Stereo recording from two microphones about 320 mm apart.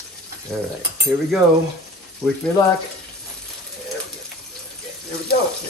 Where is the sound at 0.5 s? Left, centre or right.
Centre.